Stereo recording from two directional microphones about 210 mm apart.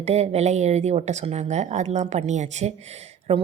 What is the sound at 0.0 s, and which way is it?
A woman's voice, 30° right (ahead or behind).